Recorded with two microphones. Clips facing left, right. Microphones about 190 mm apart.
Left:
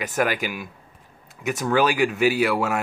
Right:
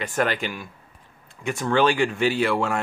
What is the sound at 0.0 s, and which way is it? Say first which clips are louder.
Speech: left 1 dB; 5° left (ahead or behind).